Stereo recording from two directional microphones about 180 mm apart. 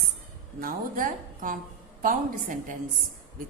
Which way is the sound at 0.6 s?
50° right (ahead or behind).